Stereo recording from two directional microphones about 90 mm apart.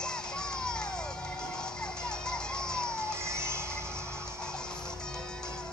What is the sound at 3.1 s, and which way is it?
Music, 30° right (ahead or behind).